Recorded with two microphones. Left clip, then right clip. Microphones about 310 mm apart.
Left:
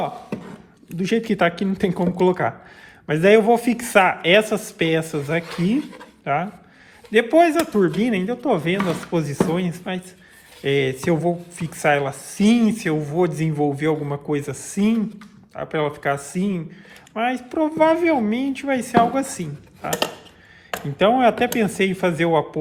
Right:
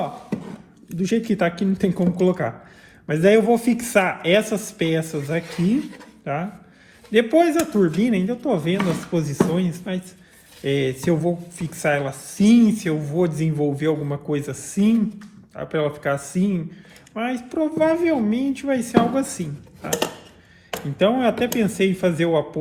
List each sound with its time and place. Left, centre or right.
0.9 s speech: left
21.0 s speech: left